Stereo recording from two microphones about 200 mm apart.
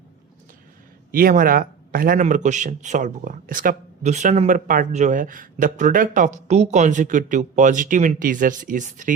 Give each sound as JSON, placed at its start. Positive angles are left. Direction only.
{"t": 1.1, "sound": "speech", "side_deg": -45}